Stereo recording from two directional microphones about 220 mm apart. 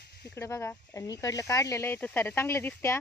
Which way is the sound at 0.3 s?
15° left (ahead or behind).